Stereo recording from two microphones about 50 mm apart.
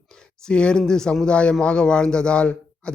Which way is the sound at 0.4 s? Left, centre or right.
Centre.